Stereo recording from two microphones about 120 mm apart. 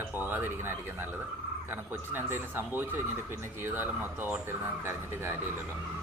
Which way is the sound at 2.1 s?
20° right (ahead or behind).